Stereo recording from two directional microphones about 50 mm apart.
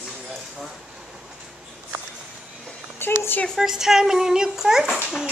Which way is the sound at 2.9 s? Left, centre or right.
Left.